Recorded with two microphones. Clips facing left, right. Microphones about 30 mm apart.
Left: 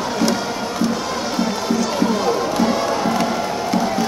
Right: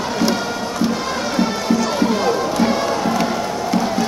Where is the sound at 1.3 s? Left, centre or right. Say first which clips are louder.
Right 2 dB; centre.